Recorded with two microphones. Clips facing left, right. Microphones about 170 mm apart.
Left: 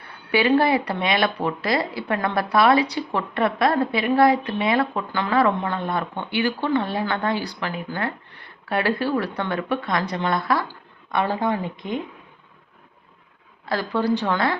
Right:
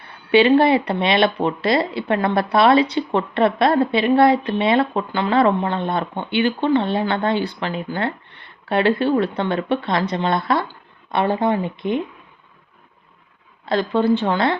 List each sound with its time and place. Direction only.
0.3 s speech: 25° right (ahead or behind)
13.7 s speech: 25° right (ahead or behind)